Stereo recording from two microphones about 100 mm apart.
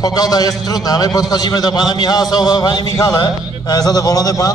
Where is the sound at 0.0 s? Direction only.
40° left (ahead or behind).